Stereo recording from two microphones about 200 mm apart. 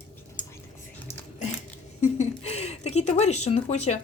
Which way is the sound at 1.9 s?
35° left (ahead or behind).